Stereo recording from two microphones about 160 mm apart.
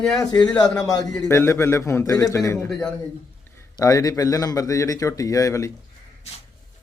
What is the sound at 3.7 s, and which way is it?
A man's voice, 20° left (ahead or behind).